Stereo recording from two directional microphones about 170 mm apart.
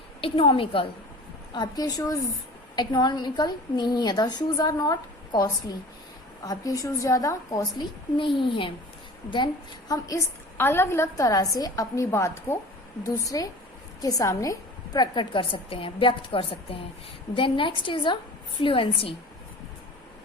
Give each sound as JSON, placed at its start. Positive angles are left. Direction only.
{"t": 0.2, "sound": "a woman's voice", "side_deg": 30}
{"t": 9.9, "sound": "a woman's voice", "side_deg": 20}